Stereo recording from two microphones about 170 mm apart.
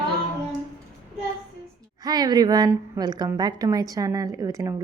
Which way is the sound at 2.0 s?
25° right (ahead or behind).